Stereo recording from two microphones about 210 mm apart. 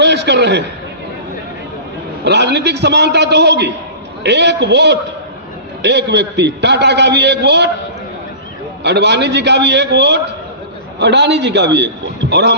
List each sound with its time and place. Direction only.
0.0 s a sound: 55° right (ahead or behind)
2.2 s a man's voice: 55° right (ahead or behind)
8.8 s a man's voice: 55° right (ahead or behind)